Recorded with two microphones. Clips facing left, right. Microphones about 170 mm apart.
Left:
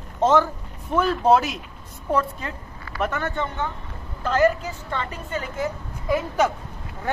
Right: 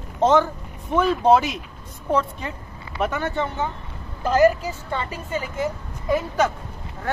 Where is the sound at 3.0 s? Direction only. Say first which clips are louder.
Right 2 dB; 5° right (ahead or behind).